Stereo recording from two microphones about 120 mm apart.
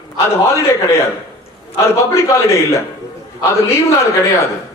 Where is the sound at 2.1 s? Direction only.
25° left (ahead or behind).